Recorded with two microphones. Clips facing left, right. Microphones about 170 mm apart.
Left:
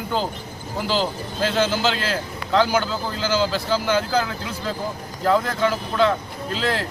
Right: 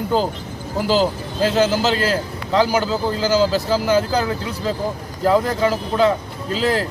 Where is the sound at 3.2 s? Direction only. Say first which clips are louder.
Right 4 dB; 40° right (ahead or behind).